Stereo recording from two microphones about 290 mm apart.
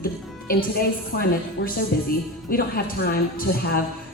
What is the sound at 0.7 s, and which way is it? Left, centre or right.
A woman's voice, left.